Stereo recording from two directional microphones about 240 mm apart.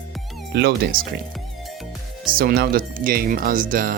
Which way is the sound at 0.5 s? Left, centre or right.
Right.